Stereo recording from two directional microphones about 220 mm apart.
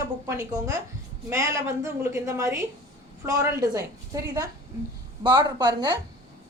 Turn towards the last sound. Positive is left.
turn(degrees=-20)  # may be behind; listen again after turning